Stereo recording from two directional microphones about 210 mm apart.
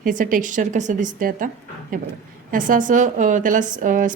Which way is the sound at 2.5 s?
40° right (ahead or behind).